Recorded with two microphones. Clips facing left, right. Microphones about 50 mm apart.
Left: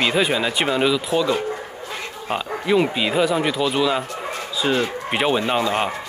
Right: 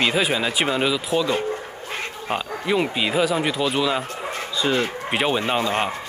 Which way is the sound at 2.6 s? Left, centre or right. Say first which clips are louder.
Left 4 dB; centre.